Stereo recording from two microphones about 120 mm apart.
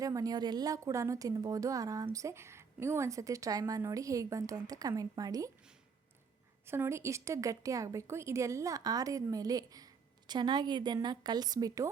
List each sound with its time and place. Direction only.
0.0 s speech: 30° right (ahead or behind)
6.7 s speech: 20° right (ahead or behind)